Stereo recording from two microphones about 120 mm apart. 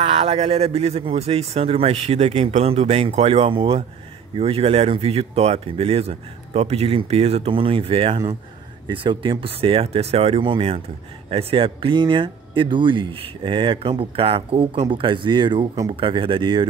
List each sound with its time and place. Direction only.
0.0 s speech: 60° right (ahead or behind)
10.4 s speech: 50° right (ahead or behind)
15.9 s speech: 50° right (ahead or behind)